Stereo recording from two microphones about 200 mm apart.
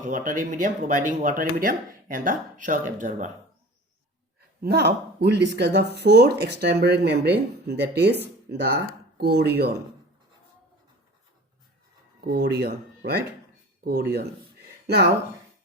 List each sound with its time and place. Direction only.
0.0 s speech: 40° right (ahead or behind)
4.6 s speech: 50° right (ahead or behind)
12.2 s speech: 55° right (ahead or behind)